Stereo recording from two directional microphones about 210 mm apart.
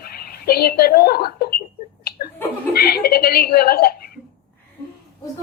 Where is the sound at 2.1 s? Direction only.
45° left (ahead or behind).